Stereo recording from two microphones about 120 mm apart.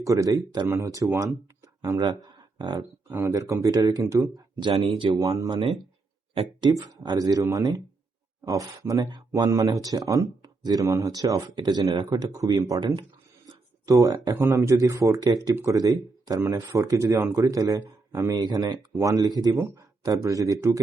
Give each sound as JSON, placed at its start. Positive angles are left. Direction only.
{"t": 0.0, "sound": "speech", "side_deg": -30}
{"t": 4.8, "sound": "speech", "side_deg": -55}
{"t": 6.3, "sound": "speech", "side_deg": -40}